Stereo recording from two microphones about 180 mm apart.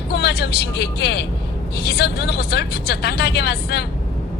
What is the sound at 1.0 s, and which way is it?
Speech, 65° left (ahead or behind).